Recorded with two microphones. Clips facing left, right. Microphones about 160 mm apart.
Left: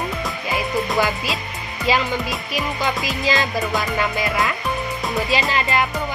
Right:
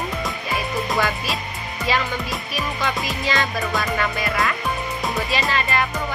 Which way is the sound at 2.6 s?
30° left (ahead or behind).